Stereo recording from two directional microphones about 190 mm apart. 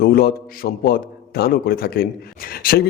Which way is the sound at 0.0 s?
55° left (ahead or behind).